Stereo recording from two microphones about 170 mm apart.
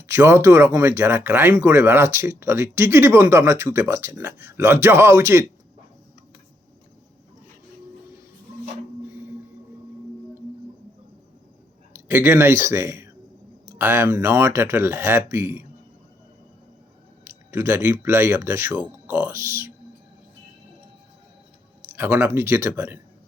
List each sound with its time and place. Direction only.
0.0 s speech: 15° right (ahead or behind)
11.9 s speech: 15° right (ahead or behind)
17.2 s speech: 15° right (ahead or behind)
21.8 s speech: 15° right (ahead or behind)